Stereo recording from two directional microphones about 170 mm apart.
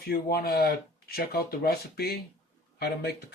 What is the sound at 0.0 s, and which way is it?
Speech, 65° left (ahead or behind).